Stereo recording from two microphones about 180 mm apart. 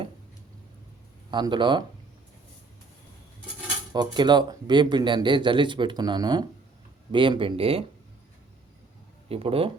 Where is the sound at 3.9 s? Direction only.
25° right (ahead or behind).